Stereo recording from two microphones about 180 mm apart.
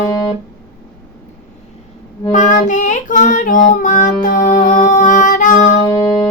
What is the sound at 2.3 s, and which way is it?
Child singing, 45° left (ahead or behind).